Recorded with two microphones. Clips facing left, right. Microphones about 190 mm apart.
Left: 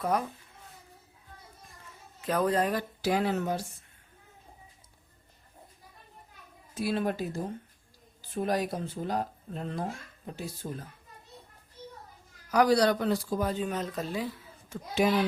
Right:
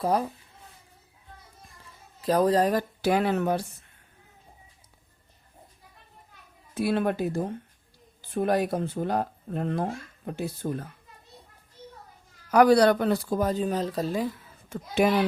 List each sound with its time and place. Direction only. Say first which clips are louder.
0.0 s speech: right 4 dB; 30° right (ahead or behind)
2.2 s speech: right 5 dB; 35° right (ahead or behind)
3.0 s a child's voice: right 3 dB; 60° right (ahead or behind)
6.7 s a child's voice: right 4 dB; 60° right (ahead or behind)
12.5 s speech: right 5 dB; 55° right (ahead or behind); by 14.3 s 40° right (ahead or behind)
14.7 s a child's voice: right 3 dB; 60° right (ahead or behind)